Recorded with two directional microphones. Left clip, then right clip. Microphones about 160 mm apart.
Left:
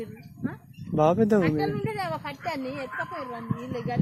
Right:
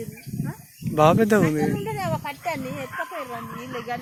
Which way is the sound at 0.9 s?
10° right (ahead or behind).